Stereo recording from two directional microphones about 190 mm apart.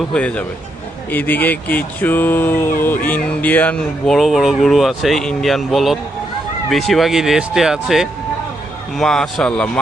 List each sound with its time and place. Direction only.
0.1 s speech: 5° left (ahead or behind)